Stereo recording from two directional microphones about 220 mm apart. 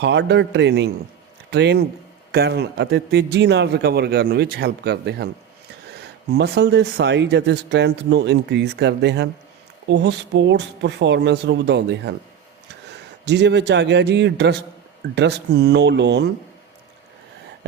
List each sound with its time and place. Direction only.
0.0 s a man's voice: 50° right (ahead or behind)
13.2 s speech: 50° right (ahead or behind)